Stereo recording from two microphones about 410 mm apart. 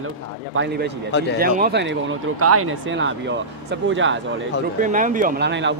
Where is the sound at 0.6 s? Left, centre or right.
Right.